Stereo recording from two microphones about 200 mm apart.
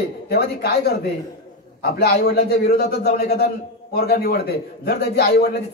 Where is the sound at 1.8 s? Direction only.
55° left (ahead or behind).